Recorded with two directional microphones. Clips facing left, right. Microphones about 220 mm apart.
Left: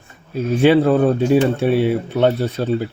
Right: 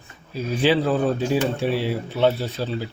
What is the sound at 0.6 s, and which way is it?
Speech, 55° left (ahead or behind).